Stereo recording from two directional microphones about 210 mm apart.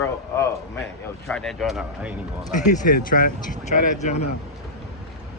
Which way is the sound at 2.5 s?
35° left (ahead or behind).